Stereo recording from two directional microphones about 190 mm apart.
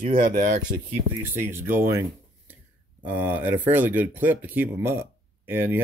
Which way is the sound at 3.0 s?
10° right (ahead or behind).